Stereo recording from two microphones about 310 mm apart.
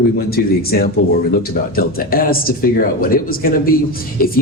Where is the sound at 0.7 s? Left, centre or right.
Left.